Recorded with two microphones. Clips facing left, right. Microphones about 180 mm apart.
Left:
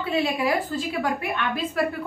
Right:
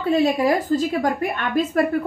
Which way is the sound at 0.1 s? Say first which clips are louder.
Right 6 dB; 40° right (ahead or behind).